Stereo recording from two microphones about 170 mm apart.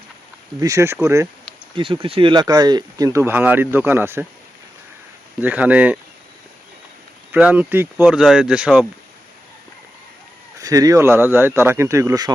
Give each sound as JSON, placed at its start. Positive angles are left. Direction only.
{"t": 0.6, "sound": "speech", "side_deg": -15}
{"t": 1.7, "sound": "speech", "side_deg": -30}
{"t": 5.4, "sound": "speech", "side_deg": -10}
{"t": 7.3, "sound": "speech", "side_deg": -10}
{"t": 10.6, "sound": "speech", "side_deg": -20}